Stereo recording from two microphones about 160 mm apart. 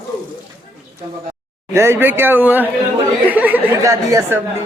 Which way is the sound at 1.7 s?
15° right (ahead or behind).